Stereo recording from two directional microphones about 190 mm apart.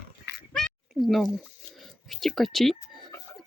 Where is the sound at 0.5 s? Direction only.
Centre (ahead or behind).